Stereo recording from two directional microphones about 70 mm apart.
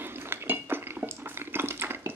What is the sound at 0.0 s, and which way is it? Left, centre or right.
Dishes, right.